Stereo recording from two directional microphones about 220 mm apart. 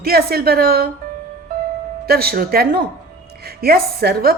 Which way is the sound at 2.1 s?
45° right (ahead or behind).